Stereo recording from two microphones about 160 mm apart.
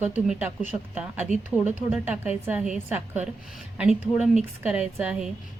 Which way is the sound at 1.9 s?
10° right (ahead or behind).